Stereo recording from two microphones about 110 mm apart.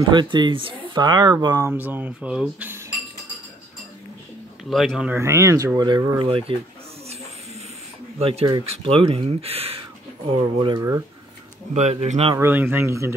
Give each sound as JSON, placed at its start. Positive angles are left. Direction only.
{"t": 0.1, "sound": "speech", "side_deg": -45}
{"t": 1.7, "sound": "speech", "side_deg": -15}
{"t": 4.6, "sound": "speech", "side_deg": 0}
{"t": 5.1, "sound": "speech", "side_deg": -25}
{"t": 6.2, "sound": "speech", "side_deg": -60}
{"t": 8.2, "sound": "speech", "side_deg": -60}
{"t": 8.6, "sound": "speech", "side_deg": -60}
{"t": 10.8, "sound": "speech", "side_deg": -25}
{"t": 11.7, "sound": "speech", "side_deg": -85}
{"t": 12.4, "sound": "speech", "side_deg": -20}